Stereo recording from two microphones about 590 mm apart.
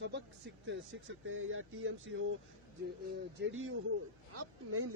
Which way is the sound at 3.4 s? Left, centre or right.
Centre.